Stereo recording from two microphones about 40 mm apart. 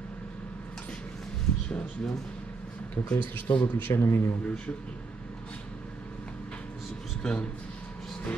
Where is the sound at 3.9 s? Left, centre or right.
Left.